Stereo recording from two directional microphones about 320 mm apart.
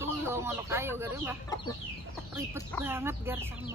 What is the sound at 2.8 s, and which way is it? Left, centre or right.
Speech, centre.